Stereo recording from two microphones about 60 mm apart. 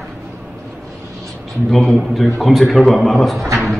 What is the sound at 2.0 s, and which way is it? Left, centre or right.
A man's voice, centre.